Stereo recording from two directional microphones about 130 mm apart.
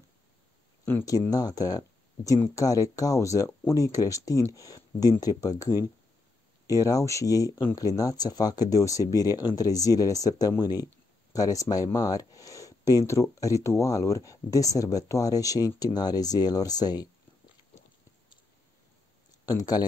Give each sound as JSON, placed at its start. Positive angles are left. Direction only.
{"t": 1.3, "sound": "speech", "side_deg": 30}
{"t": 19.4, "sound": "speech", "side_deg": 30}